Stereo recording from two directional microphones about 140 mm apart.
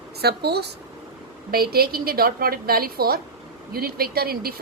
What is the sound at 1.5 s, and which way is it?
A woman's voice, 90° right.